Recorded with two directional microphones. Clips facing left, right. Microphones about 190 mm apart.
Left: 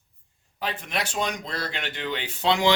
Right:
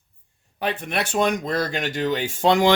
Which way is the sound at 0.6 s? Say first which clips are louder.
Right 5 dB; 60° right (ahead or behind).